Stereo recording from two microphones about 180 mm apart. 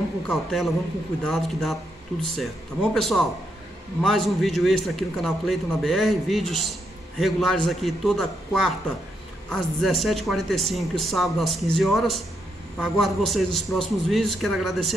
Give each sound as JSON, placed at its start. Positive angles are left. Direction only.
{"t": 0.3, "sound": "a man's voice", "side_deg": 0}